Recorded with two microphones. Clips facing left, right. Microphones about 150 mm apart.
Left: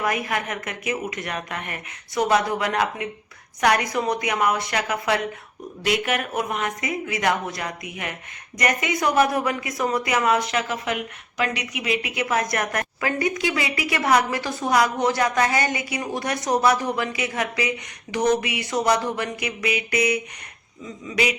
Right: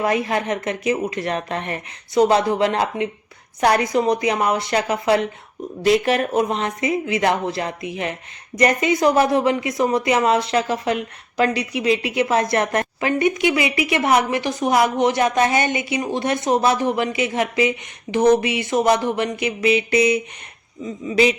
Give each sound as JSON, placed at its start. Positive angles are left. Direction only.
{"t": 0.0, "sound": "a woman's voice", "side_deg": -30}